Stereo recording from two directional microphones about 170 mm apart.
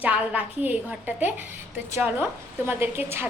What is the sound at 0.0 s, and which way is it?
A woman's voice, 10° right (ahead or behind).